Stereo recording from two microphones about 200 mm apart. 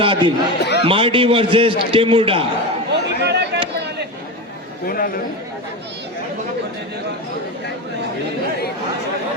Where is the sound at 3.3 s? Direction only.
55° right (ahead or behind).